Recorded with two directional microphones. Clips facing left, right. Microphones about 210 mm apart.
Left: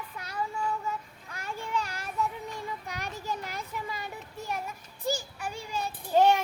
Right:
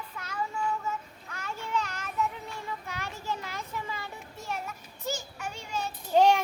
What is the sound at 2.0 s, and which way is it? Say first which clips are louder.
Child singing: even; 35° left (ahead or behind).